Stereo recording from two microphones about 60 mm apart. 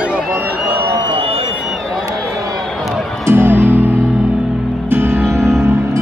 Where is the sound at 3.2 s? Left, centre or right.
Right.